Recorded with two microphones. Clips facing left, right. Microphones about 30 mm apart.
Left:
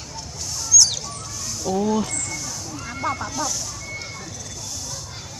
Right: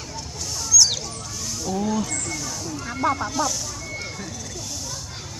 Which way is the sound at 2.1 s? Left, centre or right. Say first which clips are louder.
Right 1 dB; centre.